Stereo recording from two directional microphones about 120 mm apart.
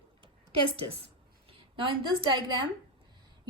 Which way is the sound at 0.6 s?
50° right (ahead or behind).